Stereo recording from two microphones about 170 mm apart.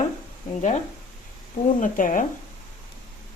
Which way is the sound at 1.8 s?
50° left (ahead or behind).